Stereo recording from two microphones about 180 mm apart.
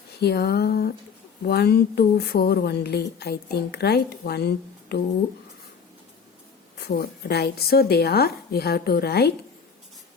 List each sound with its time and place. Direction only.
0.2 s speech: 65° left (ahead or behind)
6.7 s speech: 60° left (ahead or behind)